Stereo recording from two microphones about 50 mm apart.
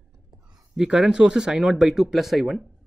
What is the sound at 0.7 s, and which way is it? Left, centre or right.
Speech, centre.